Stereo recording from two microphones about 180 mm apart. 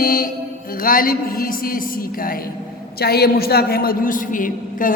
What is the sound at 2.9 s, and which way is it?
A man's voice, 60° left (ahead or behind).